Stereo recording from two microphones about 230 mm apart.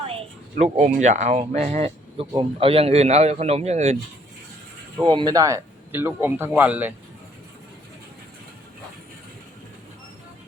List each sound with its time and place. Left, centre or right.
0.1 s a sound: right
1.0 s speech: right
5.0 s speech: centre